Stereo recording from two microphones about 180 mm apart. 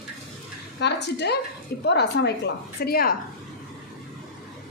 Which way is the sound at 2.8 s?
55° left (ahead or behind).